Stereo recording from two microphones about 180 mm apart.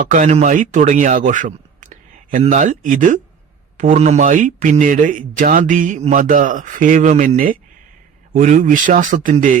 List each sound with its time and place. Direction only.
0.1 s speech: 40° right (ahead or behind)